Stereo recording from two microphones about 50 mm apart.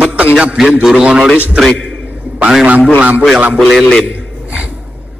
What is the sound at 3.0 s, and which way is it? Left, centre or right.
Mantra, right.